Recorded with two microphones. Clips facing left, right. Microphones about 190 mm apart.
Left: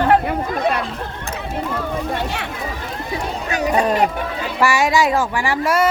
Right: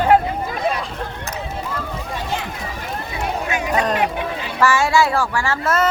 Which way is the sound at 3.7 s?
10° left (ahead or behind).